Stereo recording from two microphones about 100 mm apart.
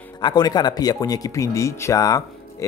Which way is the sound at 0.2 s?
45° left (ahead or behind).